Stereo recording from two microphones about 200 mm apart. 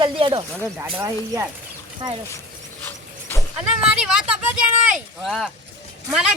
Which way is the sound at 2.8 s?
10° left (ahead or behind).